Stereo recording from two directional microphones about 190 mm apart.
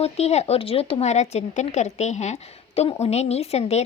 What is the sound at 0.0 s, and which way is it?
A woman's voice, 35° left (ahead or behind).